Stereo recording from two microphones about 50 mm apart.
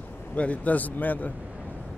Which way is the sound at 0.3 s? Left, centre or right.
Left.